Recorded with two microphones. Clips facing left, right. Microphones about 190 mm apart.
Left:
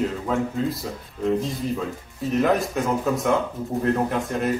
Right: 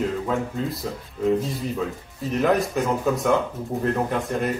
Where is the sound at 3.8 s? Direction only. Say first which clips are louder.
Left 1 dB; centre (ahead or behind).